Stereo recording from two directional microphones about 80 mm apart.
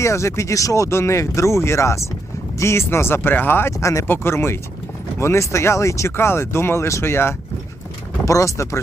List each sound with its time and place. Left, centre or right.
0.0 s speech: left